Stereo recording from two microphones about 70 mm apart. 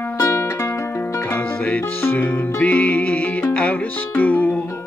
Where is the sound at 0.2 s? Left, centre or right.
Left.